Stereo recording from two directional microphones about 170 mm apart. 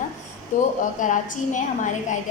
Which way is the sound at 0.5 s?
50° left (ahead or behind).